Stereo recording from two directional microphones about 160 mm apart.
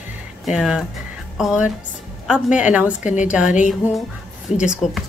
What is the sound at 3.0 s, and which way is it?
Speech, 50° left (ahead or behind).